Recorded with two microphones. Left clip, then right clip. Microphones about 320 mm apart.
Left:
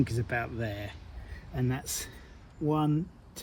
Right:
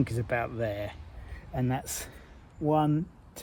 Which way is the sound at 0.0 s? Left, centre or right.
Right.